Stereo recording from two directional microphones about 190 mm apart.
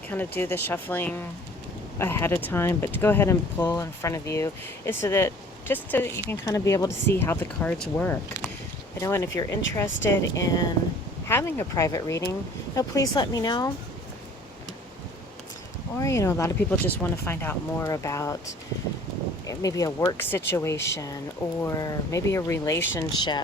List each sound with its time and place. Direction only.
0.1 s speech: 10° left (ahead or behind)
16.0 s speech: 15° left (ahead or behind)
19.5 s speech: 20° left (ahead or behind)